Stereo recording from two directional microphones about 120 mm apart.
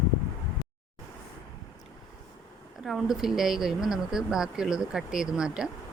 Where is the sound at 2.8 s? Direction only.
Centre (ahead or behind).